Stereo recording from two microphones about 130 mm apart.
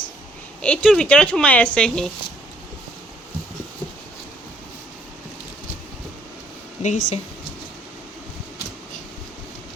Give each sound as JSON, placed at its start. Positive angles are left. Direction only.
{"t": 0.6, "sound": "speech", "side_deg": 10}
{"t": 6.8, "sound": "speech", "side_deg": 65}